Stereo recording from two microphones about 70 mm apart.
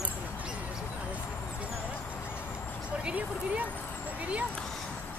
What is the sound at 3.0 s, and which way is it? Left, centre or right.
Speech, right.